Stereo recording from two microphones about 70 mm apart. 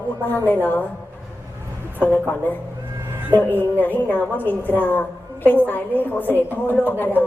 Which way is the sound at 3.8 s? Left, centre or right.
Left.